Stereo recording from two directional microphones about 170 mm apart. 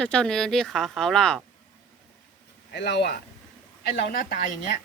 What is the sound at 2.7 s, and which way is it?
A woman's voice, 80° left.